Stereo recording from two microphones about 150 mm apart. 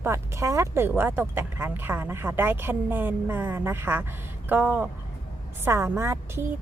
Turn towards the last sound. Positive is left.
turn(degrees=-20)  # may be behind; listen again after turning